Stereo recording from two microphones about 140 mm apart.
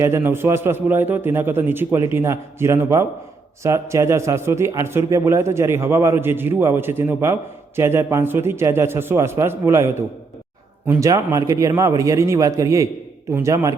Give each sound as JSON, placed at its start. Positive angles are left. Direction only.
{"t": 0.0, "sound": "a man's voice", "side_deg": -20}
{"t": 11.0, "sound": "a man's voice", "side_deg": -25}